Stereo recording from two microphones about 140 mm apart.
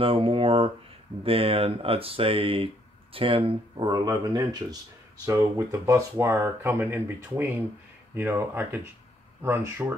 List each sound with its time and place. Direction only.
0.0 s speech: 40° right (ahead or behind); by 9.9 s 15° right (ahead or behind)